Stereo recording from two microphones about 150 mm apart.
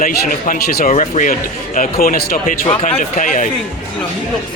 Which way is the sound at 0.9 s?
60° left (ahead or behind).